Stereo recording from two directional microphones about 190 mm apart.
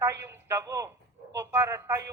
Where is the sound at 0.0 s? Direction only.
15° right (ahead or behind).